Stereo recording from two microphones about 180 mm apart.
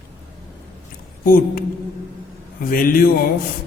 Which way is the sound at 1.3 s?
55° left (ahead or behind).